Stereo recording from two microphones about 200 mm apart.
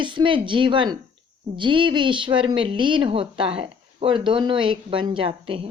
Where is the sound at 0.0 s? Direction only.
25° right (ahead or behind).